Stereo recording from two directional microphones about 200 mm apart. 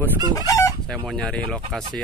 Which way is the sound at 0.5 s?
15° left (ahead or behind).